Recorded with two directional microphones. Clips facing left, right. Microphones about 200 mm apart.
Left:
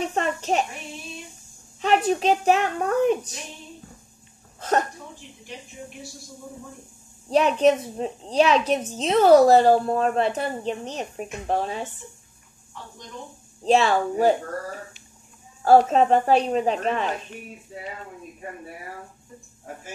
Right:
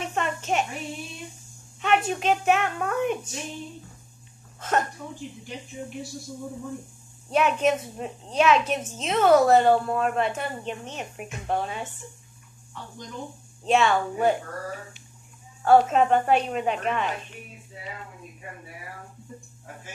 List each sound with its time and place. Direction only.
0.0 s a woman's voice: 35° left (ahead or behind)
1.8 s speech: 35° left (ahead or behind)
4.6 s speech: 35° left (ahead or behind)
7.2 s speech: 35° left (ahead or behind)
13.7 s speech: 35° left (ahead or behind)
15.6 s speech: 35° left (ahead or behind)